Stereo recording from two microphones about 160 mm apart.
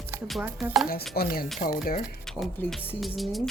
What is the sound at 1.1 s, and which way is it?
Speech, 70° left (ahead or behind).